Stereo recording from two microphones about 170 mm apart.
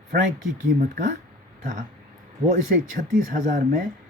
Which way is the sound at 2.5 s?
50° right (ahead or behind).